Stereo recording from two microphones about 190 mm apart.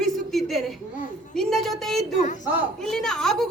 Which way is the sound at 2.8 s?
5° left (ahead or behind).